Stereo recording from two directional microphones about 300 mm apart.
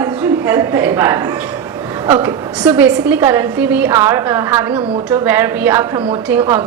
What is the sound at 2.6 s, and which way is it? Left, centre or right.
A woman's voice, centre.